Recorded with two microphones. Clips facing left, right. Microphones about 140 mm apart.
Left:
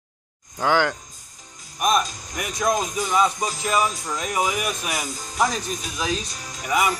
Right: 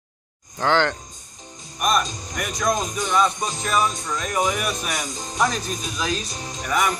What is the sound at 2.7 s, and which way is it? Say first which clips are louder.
Music: even; 5° left (ahead or behind).